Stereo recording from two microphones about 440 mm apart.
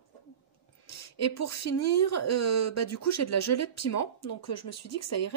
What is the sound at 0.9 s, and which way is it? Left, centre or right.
Speech, left.